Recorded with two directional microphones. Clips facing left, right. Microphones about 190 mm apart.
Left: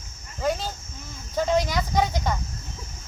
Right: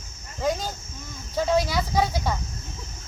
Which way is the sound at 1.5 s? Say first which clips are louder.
Right 1 dB; 10° right (ahead or behind).